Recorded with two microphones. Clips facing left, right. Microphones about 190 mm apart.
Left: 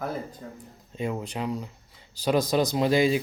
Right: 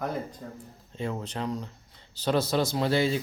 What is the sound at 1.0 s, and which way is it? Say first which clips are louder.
A man's voice: left 2 dB; 15° left (ahead or behind).